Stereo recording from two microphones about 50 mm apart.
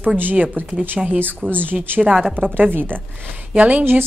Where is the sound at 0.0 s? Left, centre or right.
Right.